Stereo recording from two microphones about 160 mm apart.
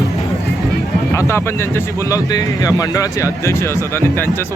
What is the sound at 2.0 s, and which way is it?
A man's voice, 20° left (ahead or behind).